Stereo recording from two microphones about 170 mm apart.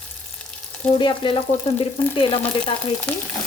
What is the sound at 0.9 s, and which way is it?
Frying, 30° left (ahead or behind).